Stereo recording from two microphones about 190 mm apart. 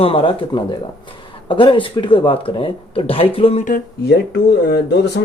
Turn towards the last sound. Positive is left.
turn(degrees=60)  # may be behind; listen again after turning